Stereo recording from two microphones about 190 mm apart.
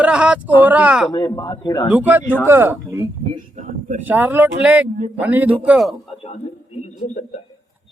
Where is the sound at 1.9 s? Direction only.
10° right (ahead or behind).